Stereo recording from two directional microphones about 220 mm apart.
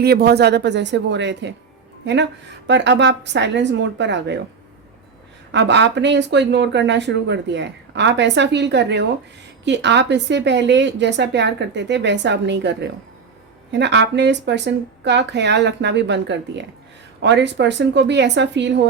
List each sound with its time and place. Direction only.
0.0 s speech: 45° right (ahead or behind)
2.6 s speech: 55° right (ahead or behind)
5.5 s speech: 50° right (ahead or behind)